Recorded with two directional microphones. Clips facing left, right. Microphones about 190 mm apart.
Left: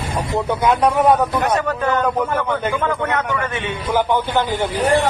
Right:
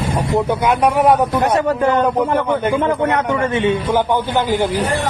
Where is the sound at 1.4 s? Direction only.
30° right (ahead or behind).